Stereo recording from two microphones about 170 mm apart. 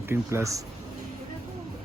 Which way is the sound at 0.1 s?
15° right (ahead or behind).